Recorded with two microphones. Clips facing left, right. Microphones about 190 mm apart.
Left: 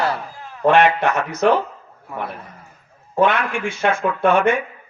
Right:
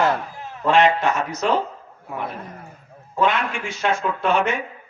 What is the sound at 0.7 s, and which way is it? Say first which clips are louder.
Speech: left 2 dB; 60° left (ahead or behind).